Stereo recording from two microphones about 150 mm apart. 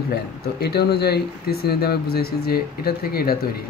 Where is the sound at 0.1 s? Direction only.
90° left.